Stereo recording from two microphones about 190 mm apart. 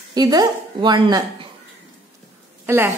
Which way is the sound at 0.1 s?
20° right (ahead or behind).